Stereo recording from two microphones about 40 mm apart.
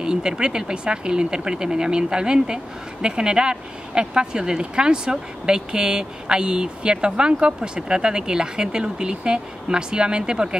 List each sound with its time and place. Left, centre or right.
0.0 s speech: centre